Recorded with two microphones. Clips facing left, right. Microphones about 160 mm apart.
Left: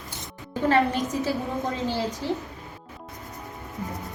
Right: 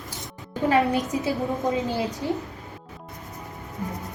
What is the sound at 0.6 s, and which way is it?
Speech, 15° right (ahead or behind).